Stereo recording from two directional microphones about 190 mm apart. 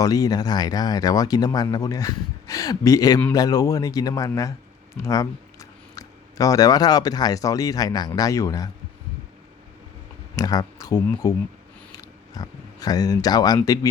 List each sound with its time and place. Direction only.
0.0 s speech: 20° left (ahead or behind)
10.3 s speech: 20° left (ahead or behind)
11.9 s a sound: 20° left (ahead or behind)